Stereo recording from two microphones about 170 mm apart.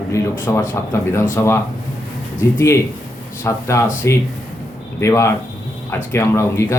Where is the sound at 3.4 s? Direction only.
15° left (ahead or behind).